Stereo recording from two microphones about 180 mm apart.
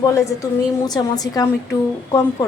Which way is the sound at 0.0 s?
15° left (ahead or behind).